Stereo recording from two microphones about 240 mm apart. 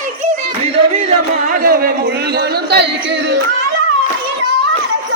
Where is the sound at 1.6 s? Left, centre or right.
Right.